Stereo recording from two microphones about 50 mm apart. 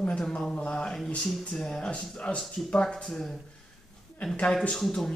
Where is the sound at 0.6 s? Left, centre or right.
Left.